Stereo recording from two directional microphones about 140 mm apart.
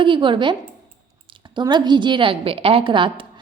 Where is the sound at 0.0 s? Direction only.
35° right (ahead or behind).